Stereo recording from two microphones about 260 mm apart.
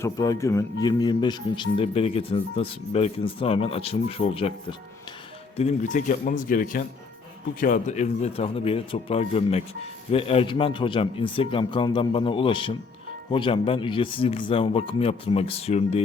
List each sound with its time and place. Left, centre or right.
0.0 s speech: centre
5.5 s speech: left